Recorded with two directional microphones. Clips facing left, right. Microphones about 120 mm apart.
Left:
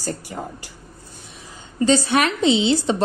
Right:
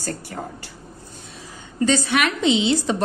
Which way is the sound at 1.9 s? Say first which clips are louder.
Left 3 dB; 30° left (ahead or behind).